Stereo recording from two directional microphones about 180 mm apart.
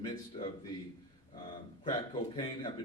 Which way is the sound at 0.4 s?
30° left (ahead or behind).